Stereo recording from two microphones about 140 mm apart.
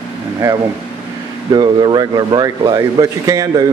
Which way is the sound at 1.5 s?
30° right (ahead or behind).